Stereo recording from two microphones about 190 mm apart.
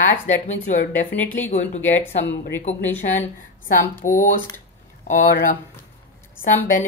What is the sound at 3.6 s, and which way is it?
Speech, 45° left (ahead or behind).